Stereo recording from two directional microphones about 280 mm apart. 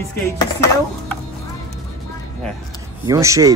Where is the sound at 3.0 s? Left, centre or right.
Centre.